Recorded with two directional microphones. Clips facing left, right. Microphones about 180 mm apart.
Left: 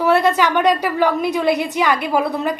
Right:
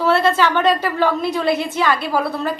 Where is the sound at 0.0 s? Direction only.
15° left (ahead or behind).